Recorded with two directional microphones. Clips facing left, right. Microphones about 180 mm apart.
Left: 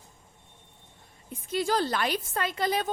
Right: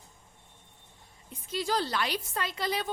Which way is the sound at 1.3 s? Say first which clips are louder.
Left 4 dB; 50° left (ahead or behind).